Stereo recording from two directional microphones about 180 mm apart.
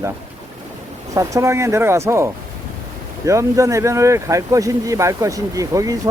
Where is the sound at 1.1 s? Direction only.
15° right (ahead or behind).